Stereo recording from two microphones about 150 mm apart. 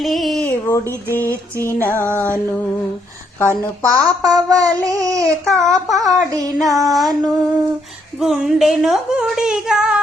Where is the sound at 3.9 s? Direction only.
25° right (ahead or behind).